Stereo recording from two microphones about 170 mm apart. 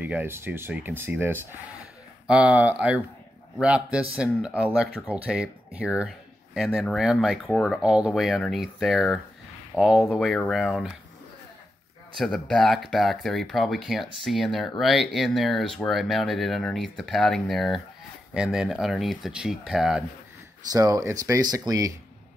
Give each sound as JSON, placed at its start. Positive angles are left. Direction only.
{"t": 0.0, "sound": "speech", "side_deg": -10}
{"t": 12.2, "sound": "speech", "side_deg": 5}
{"t": 20.7, "sound": "speech", "side_deg": -20}